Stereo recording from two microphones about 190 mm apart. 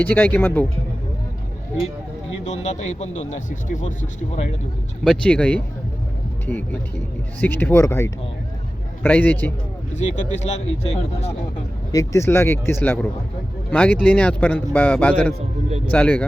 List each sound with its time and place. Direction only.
0.0 s speech: 10° left (ahead or behind)
2.5 s speech: 40° left (ahead or behind)
5.0 s speech: 5° left (ahead or behind)
9.9 s speech: 35° left (ahead or behind)
11.9 s speech: 15° left (ahead or behind)